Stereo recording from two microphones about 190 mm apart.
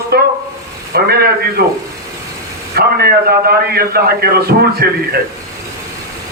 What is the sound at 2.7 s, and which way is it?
A man's voice, 55° right (ahead or behind).